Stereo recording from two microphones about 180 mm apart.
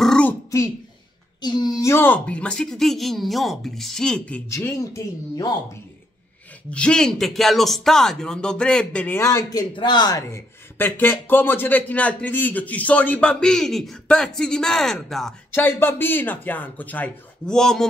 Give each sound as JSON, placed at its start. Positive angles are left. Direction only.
{"t": 0.0, "sound": "throat clearing", "side_deg": 5}
{"t": 0.5, "sound": "speech", "side_deg": 15}
{"t": 4.5, "sound": "speech", "side_deg": 15}
{"t": 6.7, "sound": "speech", "side_deg": 5}
{"t": 15.5, "sound": "speech", "side_deg": 10}